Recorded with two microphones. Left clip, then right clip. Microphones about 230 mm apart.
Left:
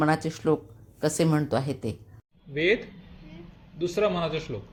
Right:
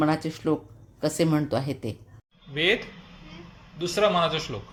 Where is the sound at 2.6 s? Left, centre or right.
Right.